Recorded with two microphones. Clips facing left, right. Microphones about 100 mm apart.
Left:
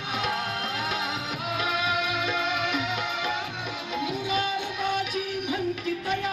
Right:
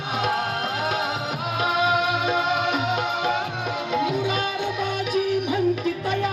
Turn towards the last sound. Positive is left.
turn(degrees=-75)  # may be behind; listen again after turning